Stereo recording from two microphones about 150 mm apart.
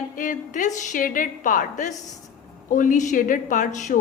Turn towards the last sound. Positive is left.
turn(degrees=55)  # may be behind; listen again after turning